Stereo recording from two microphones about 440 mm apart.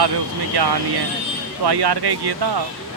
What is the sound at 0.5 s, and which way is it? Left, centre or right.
Speech, right.